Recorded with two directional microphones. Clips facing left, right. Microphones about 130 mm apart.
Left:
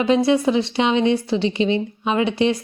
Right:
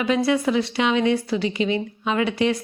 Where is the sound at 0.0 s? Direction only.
25° left (ahead or behind).